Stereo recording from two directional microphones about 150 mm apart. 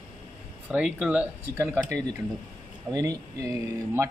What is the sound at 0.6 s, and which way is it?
Speech, 5° right (ahead or behind).